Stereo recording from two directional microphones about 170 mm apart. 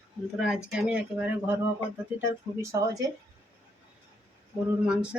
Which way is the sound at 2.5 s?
20° right (ahead or behind).